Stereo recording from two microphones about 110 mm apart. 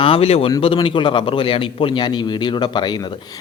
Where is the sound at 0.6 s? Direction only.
55° left (ahead or behind).